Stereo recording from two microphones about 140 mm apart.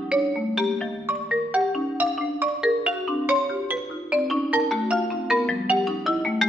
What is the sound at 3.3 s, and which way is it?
Music, 10° right (ahead or behind).